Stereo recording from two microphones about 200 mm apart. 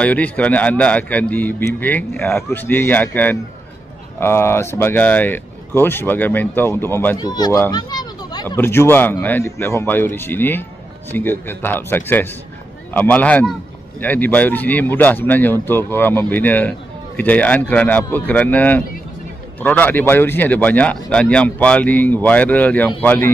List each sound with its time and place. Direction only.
0.0 s speech: 5° left (ahead or behind)